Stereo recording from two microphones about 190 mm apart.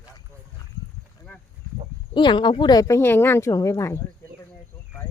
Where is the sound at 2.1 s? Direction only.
25° left (ahead or behind).